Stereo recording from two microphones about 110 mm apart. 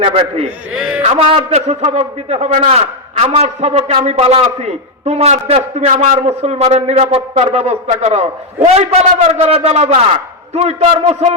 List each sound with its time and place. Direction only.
0.0 s a man's voice: 60° right (ahead or behind)
0.8 s a sound: 5° right (ahead or behind)
1.1 s a man's voice: 75° right (ahead or behind)